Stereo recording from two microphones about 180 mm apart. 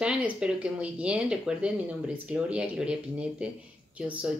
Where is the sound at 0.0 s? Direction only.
5° right (ahead or behind).